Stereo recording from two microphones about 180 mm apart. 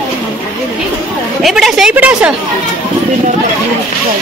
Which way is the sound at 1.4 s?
Centre (ahead or behind).